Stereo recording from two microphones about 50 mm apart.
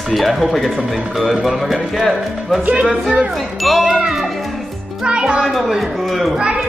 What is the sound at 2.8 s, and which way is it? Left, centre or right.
Speech, right.